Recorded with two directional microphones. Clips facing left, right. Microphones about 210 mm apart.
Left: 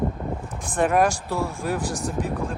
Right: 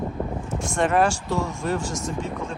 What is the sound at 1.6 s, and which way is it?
Speech, 10° left (ahead or behind).